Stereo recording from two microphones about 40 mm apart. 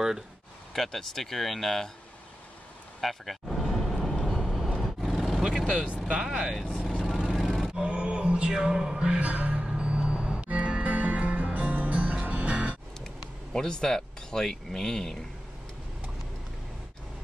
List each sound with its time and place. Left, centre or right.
0.7 s speech: centre
3.0 s a sound: centre
4.5 s vehicle: centre
6.0 s speech: centre
6.6 s speech: right
7.1 s vehicle: centre
7.7 s music: right
8.7 s music: centre
9.1 s music: right
13.0 s speech: centre